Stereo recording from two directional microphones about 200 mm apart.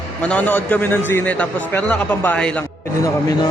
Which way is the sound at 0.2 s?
5° left (ahead or behind).